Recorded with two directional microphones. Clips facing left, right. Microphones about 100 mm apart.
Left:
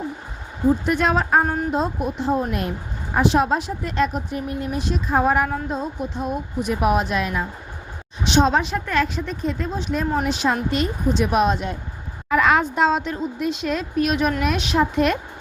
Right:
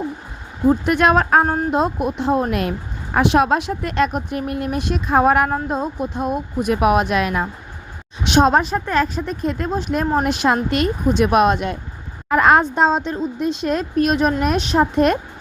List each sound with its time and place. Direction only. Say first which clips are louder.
0.7 s speech: right 4 dB; 65° right (ahead or behind); by 2.7 s 90° right
3.2 s speech: right 3 dB; 70° right (ahead or behind)
5.5 s speech: right 4 dB; 50° right (ahead or behind)
6.8 s speech: right 3 dB; 70° right (ahead or behind)
8.3 s speech: right 3 dB; 50° right (ahead or behind)
9.4 s speech: right 4 dB; 55° right (ahead or behind)
12.3 s a woman's voice: right 4 dB; 45° right (ahead or behind)